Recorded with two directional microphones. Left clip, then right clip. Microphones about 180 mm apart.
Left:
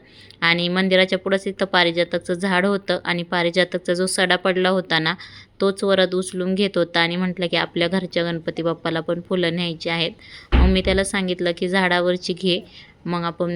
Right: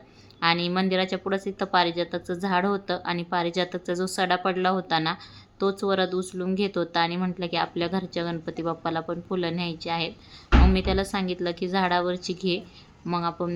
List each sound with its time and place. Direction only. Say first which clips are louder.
0.3 s speech: left 5 dB; 15° left (ahead or behind)